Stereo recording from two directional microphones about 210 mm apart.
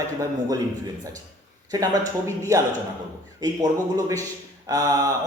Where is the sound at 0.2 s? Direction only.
15° right (ahead or behind).